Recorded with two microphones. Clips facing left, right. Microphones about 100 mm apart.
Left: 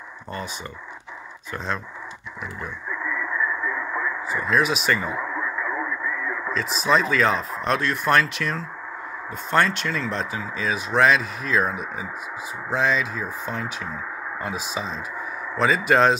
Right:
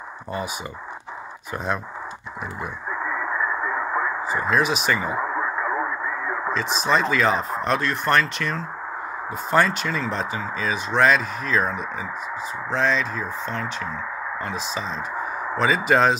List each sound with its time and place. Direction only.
2.9 s radio: 40° right (ahead or behind)
4.2 s speech: centre (ahead or behind)
5.2 s radio: 40° right (ahead or behind)
6.5 s speech: centre (ahead or behind)